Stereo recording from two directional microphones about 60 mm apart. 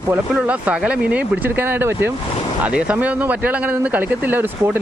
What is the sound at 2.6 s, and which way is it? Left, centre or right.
Speech, centre.